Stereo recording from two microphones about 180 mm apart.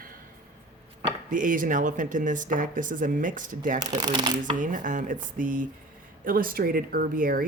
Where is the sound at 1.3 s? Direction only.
45° right (ahead or behind).